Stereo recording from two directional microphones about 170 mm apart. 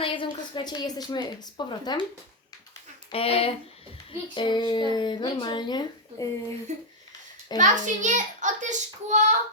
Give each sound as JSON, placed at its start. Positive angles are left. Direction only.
{"t": 0.0, "sound": "a woman's voice", "side_deg": 30}
{"t": 3.1, "sound": "speech", "side_deg": 35}
{"t": 6.7, "sound": "a child's voice", "side_deg": -45}